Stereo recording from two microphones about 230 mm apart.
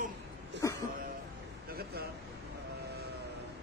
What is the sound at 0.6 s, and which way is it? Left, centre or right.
Speech, centre.